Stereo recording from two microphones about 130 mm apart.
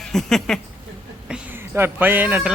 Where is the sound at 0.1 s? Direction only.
5° left (ahead or behind).